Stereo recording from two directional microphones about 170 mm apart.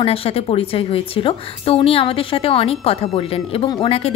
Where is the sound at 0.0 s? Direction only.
35° left (ahead or behind).